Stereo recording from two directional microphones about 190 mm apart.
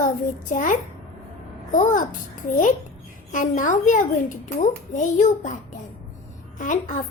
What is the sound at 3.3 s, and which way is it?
A child's voice, 45° left (ahead or behind).